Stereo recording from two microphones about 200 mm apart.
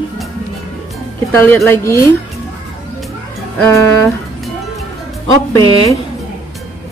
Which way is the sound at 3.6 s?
15° left (ahead or behind).